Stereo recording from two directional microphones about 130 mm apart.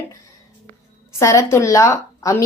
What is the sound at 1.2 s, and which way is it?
A woman's voice, 25° left (ahead or behind).